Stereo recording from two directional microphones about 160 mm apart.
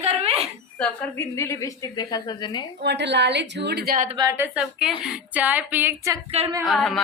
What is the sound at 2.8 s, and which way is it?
A woman's voice, 90° right.